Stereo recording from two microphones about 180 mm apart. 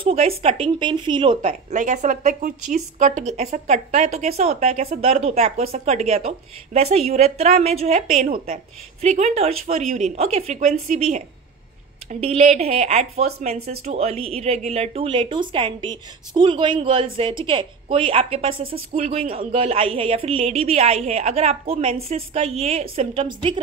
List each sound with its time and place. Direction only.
0.0 s speech: 35° right (ahead or behind)
1.5 s a woman's voice: 45° right (ahead or behind); by 23.6 s 30° right (ahead or behind)